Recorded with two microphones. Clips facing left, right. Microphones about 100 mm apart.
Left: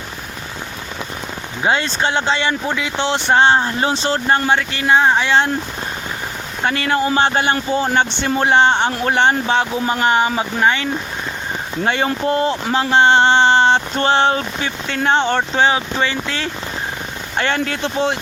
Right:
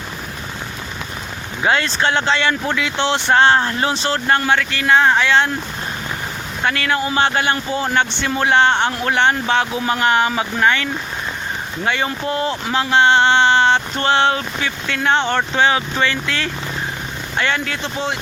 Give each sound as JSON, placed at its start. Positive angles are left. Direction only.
{"t": 1.6, "sound": "speech", "side_deg": 20}
{"t": 6.7, "sound": "speech", "side_deg": 30}
{"t": 11.9, "sound": "speech", "side_deg": 35}
{"t": 17.3, "sound": "speech", "side_deg": 40}